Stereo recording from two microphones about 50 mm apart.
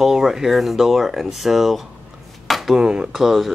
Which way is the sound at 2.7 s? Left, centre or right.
Centre.